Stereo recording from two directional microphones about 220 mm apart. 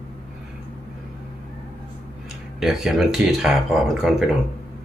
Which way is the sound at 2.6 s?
Centre (ahead or behind).